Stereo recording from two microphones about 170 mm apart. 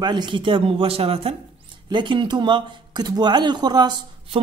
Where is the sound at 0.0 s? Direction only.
25° right (ahead or behind).